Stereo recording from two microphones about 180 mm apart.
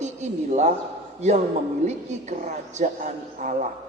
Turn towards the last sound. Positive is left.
turn(degrees=-45)  # may be behind; listen again after turning